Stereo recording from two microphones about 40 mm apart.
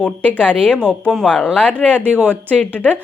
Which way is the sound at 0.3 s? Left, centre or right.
Left.